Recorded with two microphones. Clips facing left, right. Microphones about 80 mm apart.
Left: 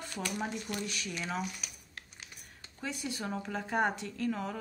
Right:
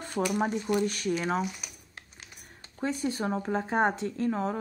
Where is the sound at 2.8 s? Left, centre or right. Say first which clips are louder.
Right 8 dB; right.